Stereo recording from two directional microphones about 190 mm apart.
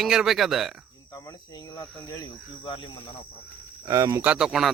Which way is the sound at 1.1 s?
20° left (ahead or behind).